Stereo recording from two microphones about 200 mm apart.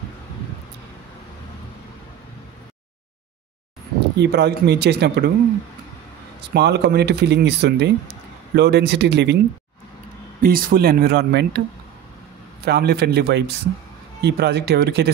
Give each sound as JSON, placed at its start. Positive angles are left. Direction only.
{"t": 4.2, "sound": "speech", "side_deg": -55}
{"t": 6.5, "sound": "speech", "side_deg": -55}
{"t": 10.4, "sound": "speech", "side_deg": -45}
{"t": 12.6, "sound": "speech", "side_deg": -55}